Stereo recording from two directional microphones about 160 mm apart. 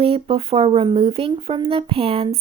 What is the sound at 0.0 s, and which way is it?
Speech, 35° right (ahead or behind).